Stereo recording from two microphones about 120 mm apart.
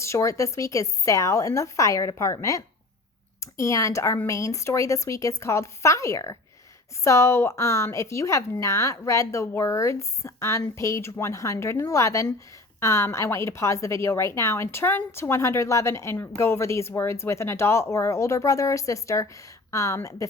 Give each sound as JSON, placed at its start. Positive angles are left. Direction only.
{"t": 0.0, "sound": "a woman's voice", "side_deg": 25}